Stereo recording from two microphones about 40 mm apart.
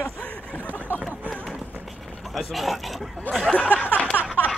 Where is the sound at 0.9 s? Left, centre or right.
Right.